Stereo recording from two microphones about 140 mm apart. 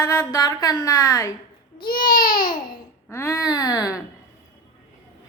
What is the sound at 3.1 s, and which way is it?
Speech, 20° left (ahead or behind).